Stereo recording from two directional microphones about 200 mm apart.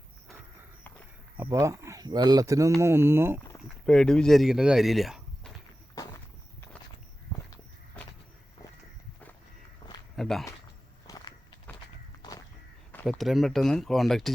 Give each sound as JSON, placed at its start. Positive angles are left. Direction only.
{"t": 1.4, "sound": "speech", "side_deg": -15}
{"t": 3.8, "sound": "speech", "side_deg": 5}
{"t": 9.8, "sound": "walk", "side_deg": 25}
{"t": 10.2, "sound": "walk", "side_deg": 0}
{"t": 11.0, "sound": "walk", "side_deg": 20}
{"t": 12.2, "sound": "crow", "side_deg": 20}
{"t": 12.9, "sound": "speech", "side_deg": 5}